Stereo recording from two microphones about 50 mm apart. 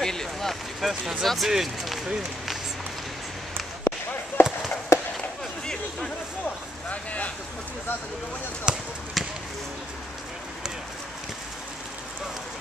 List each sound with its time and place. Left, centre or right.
0.0 s a sound: centre
1.2 s speech: centre
4.4 s fireworks: left
4.9 s chop: left
6.9 s a sound: left
8.7 s speech: centre
9.2 s basketball bounce: centre